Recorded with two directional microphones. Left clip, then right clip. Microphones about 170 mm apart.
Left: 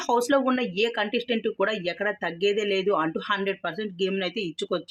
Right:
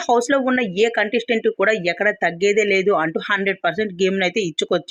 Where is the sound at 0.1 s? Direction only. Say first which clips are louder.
Right 5 dB; 20° right (ahead or behind).